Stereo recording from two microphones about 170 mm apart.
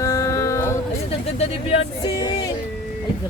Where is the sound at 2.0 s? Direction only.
25° left (ahead or behind).